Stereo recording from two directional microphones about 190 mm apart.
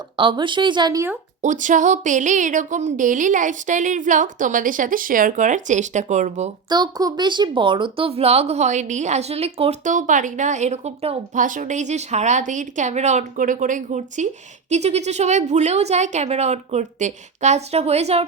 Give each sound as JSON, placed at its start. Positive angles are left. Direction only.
{"t": 0.2, "sound": "speech", "side_deg": -25}
{"t": 1.4, "sound": "speech", "side_deg": -40}
{"t": 6.7, "sound": "speech", "side_deg": -20}